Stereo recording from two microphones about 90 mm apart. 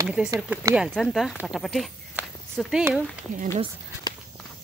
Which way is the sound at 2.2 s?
15° right (ahead or behind).